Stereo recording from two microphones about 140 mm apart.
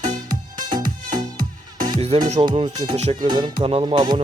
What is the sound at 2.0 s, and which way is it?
Speech, 45° right (ahead or behind).